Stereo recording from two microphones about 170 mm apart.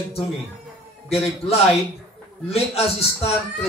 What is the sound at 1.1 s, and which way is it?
A man's voice, 35° left (ahead or behind).